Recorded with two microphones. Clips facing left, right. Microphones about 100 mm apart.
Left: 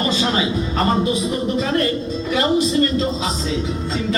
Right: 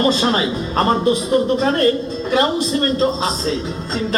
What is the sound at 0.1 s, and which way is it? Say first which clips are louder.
A man's voice: right 2 dB; 40° right (ahead or behind).